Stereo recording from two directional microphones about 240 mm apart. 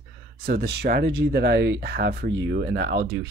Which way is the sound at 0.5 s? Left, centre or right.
Right.